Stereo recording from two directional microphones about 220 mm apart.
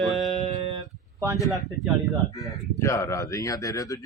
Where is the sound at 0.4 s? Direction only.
25° right (ahead or behind).